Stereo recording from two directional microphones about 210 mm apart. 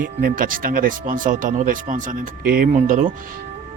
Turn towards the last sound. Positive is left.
turn(degrees=-35)  # may be behind; listen again after turning